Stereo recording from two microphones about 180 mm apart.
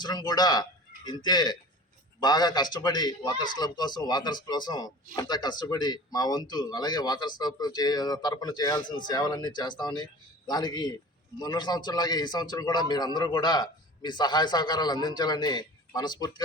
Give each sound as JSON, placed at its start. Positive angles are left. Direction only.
{"t": 0.0, "sound": "speech", "side_deg": 25}